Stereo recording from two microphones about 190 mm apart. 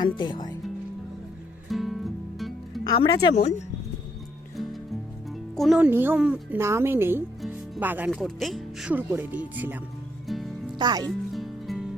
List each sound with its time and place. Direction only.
0.0 s speech: 25° left (ahead or behind)
1.7 s music: centre (ahead or behind)
2.9 s speech: 25° left (ahead or behind)
5.5 s speech: centre (ahead or behind)
7.4 s music: 10° right (ahead or behind)
8.1 s speech: centre (ahead or behind)
10.2 s music: centre (ahead or behind)
10.8 s speech: 20° right (ahead or behind)
11.0 s music: centre (ahead or behind)